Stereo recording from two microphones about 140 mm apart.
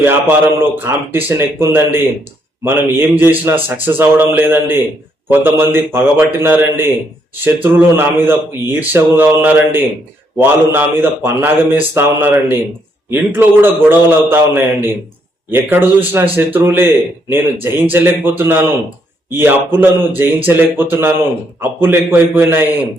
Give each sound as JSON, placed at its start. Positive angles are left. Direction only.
{"t": 0.0, "sound": "a man's voice", "side_deg": -15}
{"t": 13.1, "sound": "a man's voice", "side_deg": -15}